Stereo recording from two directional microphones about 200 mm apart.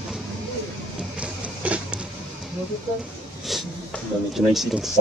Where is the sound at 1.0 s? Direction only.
5° right (ahead or behind).